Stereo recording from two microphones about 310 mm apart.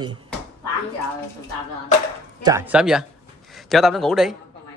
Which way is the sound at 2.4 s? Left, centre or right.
Centre.